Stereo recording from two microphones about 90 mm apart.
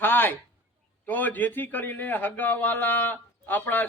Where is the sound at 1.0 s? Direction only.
20° left (ahead or behind).